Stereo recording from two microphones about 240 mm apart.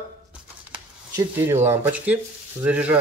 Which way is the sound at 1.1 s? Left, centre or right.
Centre.